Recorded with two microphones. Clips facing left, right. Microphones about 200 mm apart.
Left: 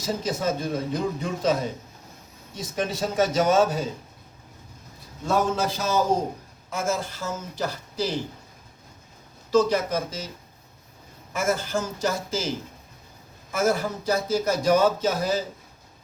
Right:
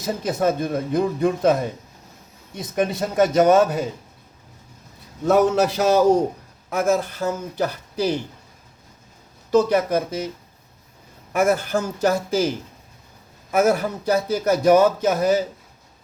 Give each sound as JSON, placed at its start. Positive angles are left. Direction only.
{"t": 0.0, "sound": "a man's voice", "side_deg": -60}
{"t": 2.6, "sound": "a man's voice", "side_deg": -60}
{"t": 5.2, "sound": "a man's voice", "side_deg": -65}
{"t": 9.5, "sound": "a man's voice", "side_deg": -60}
{"t": 11.3, "sound": "a man's voice", "side_deg": -60}